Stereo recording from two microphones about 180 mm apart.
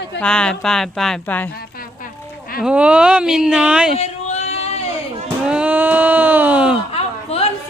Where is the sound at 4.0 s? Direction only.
40° left (ahead or behind).